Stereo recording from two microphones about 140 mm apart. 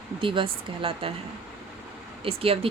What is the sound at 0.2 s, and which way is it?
Speech, 40° right (ahead or behind).